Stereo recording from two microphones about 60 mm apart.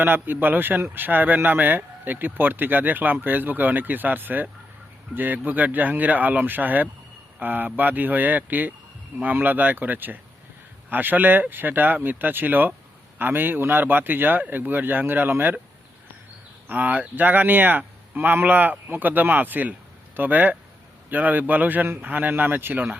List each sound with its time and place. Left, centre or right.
0.0 s speech: right
16.6 s speech: right